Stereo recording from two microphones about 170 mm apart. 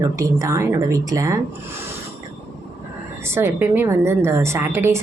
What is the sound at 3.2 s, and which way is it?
A woman's voice, 15° right (ahead or behind).